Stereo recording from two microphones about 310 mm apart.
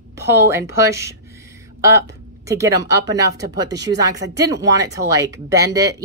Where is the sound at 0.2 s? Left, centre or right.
Centre.